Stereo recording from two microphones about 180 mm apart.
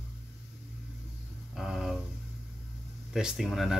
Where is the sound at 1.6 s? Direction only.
Centre (ahead or behind).